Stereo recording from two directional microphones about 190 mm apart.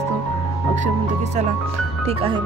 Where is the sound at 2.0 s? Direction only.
30° right (ahead or behind).